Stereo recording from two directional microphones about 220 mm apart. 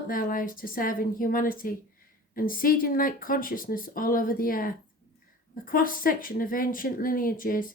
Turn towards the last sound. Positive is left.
turn(degrees=40)  # may be behind; listen again after turning